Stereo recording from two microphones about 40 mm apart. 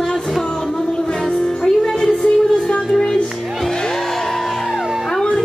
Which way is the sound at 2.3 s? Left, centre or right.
Left.